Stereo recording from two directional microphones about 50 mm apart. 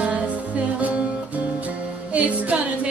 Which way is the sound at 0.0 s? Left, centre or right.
Right.